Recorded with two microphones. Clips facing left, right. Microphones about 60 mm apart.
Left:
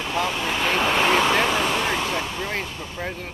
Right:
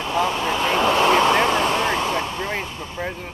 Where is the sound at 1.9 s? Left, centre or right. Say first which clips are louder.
Right 3 dB; centre.